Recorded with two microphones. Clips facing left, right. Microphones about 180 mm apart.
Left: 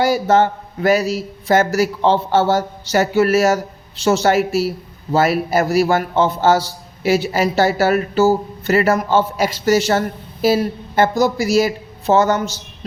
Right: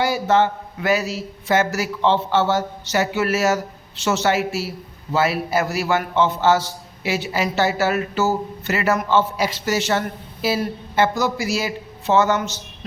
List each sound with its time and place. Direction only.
0.0 s a man's voice: 40° left (ahead or behind)